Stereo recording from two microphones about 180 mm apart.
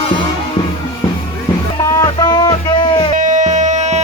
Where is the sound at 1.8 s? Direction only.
20° left (ahead or behind).